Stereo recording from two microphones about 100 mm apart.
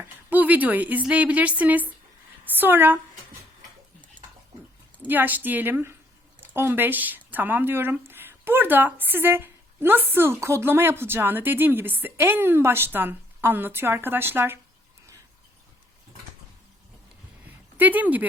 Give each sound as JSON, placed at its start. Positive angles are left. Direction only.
{"t": 0.0, "sound": "a woman's voice", "side_deg": -15}
{"t": 5.0, "sound": "speech", "side_deg": -20}
{"t": 17.4, "sound": "a sound", "side_deg": -15}